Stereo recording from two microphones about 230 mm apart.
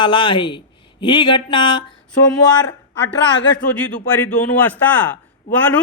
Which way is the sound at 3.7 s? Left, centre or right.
Centre.